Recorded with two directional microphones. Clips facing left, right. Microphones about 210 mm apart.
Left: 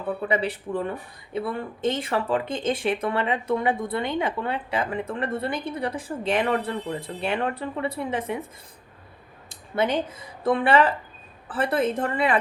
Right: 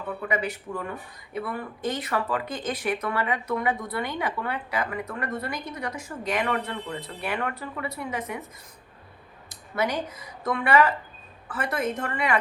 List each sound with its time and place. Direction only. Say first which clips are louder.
0.2 s speech: left 3 dB; 30° left (ahead or behind)
9.7 s a woman's voice: left 3 dB; 25° left (ahead or behind)